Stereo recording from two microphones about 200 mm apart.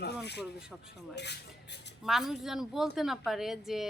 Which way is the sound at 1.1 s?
60° left (ahead or behind).